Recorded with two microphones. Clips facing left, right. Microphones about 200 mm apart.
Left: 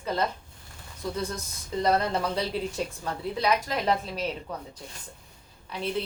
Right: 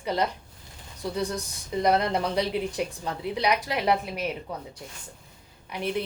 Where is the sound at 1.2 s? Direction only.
15° right (ahead or behind).